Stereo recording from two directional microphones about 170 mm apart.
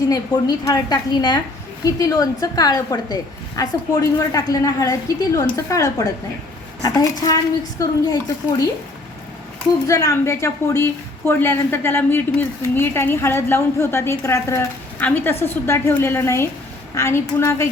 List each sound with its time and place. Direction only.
0.0 s a woman's voice: 25° left (ahead or behind)
9.8 s a woman's voice: 20° left (ahead or behind)